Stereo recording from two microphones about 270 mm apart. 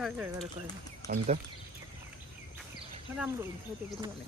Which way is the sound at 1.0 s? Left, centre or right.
Centre.